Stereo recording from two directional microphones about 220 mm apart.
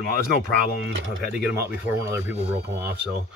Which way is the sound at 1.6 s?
10° right (ahead or behind).